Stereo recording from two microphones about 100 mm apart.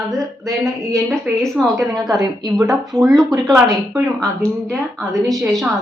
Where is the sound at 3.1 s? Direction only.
35° right (ahead or behind).